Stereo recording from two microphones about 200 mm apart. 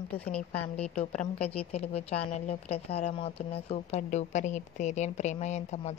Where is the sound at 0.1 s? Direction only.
5° left (ahead or behind).